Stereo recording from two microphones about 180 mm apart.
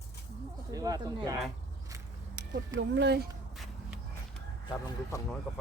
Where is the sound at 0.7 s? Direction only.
20° right (ahead or behind).